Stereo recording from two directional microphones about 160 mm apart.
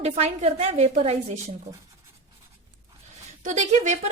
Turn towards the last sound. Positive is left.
turn(degrees=-50)  # may be behind; listen again after turning